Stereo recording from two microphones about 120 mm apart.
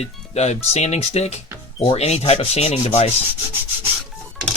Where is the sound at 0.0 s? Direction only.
65° left (ahead or behind).